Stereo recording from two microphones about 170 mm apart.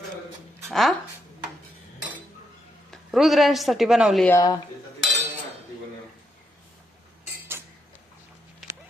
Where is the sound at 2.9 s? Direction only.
Centre (ahead or behind).